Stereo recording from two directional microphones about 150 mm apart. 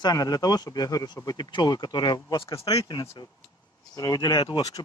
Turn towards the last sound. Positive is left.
turn(degrees=25)  # may be behind; listen again after turning